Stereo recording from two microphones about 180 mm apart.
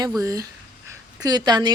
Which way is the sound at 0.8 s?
20° right (ahead or behind).